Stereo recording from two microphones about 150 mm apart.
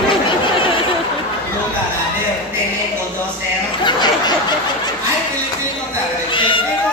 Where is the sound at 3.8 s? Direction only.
30° left (ahead or behind).